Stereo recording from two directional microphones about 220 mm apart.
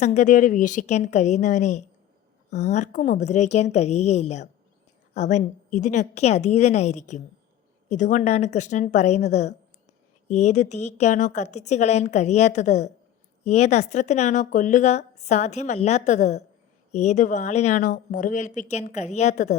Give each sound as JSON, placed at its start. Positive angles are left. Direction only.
{"t": 0.0, "sound": "speech", "side_deg": 35}